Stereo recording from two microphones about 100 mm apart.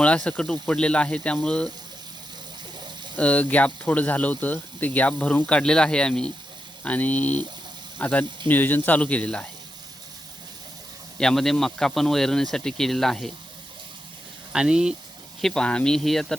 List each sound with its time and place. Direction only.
0.0 s speech: 10° left (ahead or behind)
3.2 s speech: 15° left (ahead or behind)
11.2 s speech: 5° left (ahead or behind)
14.5 s speech: 5° right (ahead or behind)
15.4 s speech: 5° left (ahead or behind)